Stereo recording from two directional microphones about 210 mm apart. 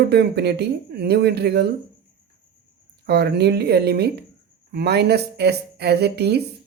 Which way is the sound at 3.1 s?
50° right (ahead or behind).